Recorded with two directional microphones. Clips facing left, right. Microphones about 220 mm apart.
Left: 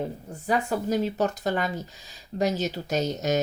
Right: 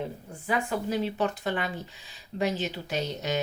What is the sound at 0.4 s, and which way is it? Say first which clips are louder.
Speech: left 3 dB; 40° left (ahead or behind).